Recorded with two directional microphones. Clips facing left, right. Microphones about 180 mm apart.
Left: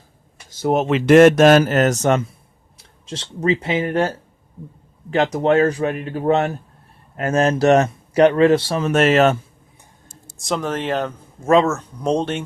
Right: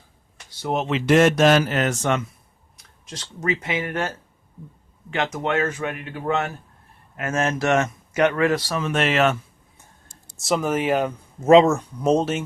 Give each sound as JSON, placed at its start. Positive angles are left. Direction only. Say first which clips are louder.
{"t": 0.6, "sound": "speech", "louder": "left 6 dB", "side_deg": 50}
{"t": 2.7, "sound": "speech", "louder": "left 7 dB", "side_deg": 30}
{"t": 8.8, "sound": "speech", "louder": "left 5 dB", "side_deg": 40}
{"t": 10.3, "sound": "speech", "louder": "right 1 dB", "side_deg": -5}